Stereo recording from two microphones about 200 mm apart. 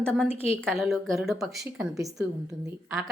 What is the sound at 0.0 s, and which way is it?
Speech, 5° left (ahead or behind).